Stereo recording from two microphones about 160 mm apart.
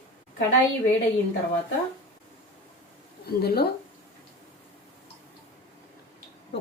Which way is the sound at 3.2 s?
80° left.